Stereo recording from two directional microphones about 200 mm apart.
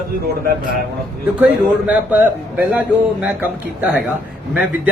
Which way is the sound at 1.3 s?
5° right (ahead or behind).